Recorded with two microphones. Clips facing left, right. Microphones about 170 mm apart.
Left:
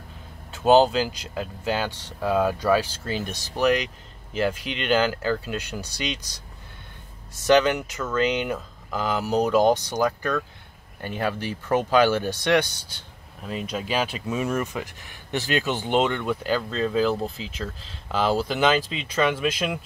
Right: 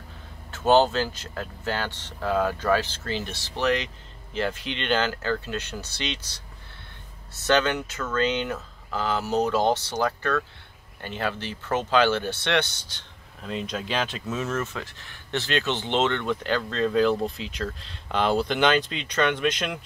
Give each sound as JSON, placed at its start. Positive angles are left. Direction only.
{"t": 0.5, "sound": "speech", "side_deg": 15}
{"t": 4.3, "sound": "speech", "side_deg": 10}
{"t": 7.4, "sound": "speech", "side_deg": 10}